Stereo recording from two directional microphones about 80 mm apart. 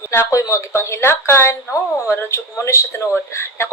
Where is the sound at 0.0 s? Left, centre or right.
Left.